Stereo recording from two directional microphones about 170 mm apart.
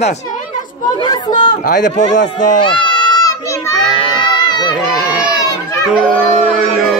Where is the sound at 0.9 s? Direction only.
25° left (ahead or behind).